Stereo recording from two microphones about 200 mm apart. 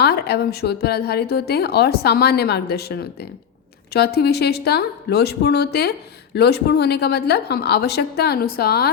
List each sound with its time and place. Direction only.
0.0 s a woman's voice: 55° left (ahead or behind)